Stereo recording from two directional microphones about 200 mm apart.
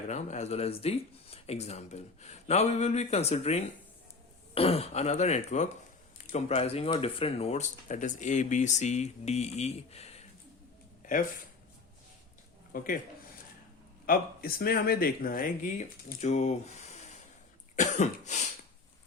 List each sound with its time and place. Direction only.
0.1 s speech: 35° left (ahead or behind)
11.0 s a sound: 40° left (ahead or behind)
12.7 s speech: 45° left (ahead or behind)
14.1 s speech: 50° left (ahead or behind)
17.7 s cough: 35° left (ahead or behind)